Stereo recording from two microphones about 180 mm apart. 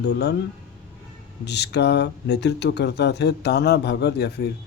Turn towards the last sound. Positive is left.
turn(degrees=65)  # may be behind; listen again after turning